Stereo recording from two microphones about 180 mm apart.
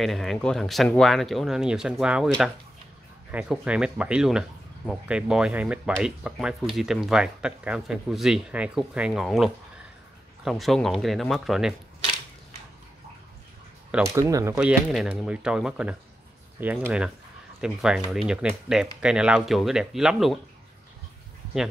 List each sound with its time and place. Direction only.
0.0 s speech: centre (ahead or behind)
14.0 s speech: 15° right (ahead or behind)
14.5 s speech: 5° right (ahead or behind)